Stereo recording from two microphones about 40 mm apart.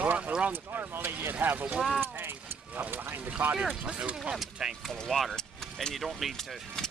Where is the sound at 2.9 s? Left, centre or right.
Right.